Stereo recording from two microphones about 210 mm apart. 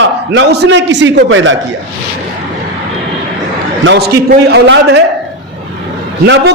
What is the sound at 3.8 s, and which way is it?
A man's voice, 50° right (ahead or behind).